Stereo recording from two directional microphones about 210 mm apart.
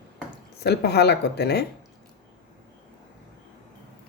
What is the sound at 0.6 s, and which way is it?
A woman's voice, 50° left (ahead or behind).